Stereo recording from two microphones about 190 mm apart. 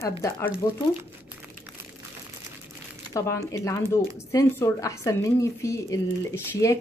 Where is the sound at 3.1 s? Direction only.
15° left (ahead or behind).